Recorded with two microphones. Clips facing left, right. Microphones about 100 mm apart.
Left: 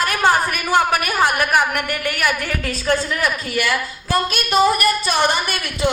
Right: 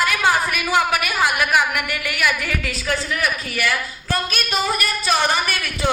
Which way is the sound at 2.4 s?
35° left (ahead or behind).